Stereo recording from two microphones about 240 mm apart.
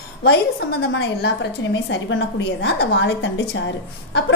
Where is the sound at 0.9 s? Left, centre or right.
Left.